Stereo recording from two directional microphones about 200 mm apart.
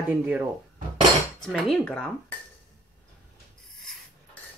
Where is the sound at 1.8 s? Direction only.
5° left (ahead or behind).